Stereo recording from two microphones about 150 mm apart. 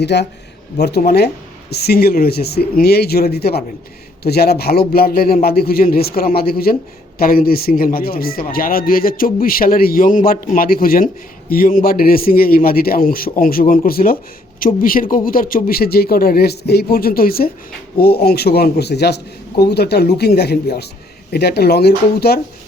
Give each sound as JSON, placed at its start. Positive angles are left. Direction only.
{"t": 0.8, "sound": "a man's voice", "side_deg": 90}
{"t": 7.2, "sound": "a man's voice", "side_deg": 75}